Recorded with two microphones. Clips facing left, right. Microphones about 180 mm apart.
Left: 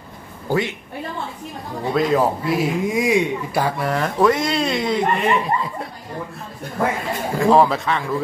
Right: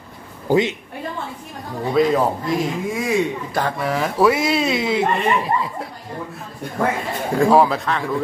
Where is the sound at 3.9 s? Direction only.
5° right (ahead or behind).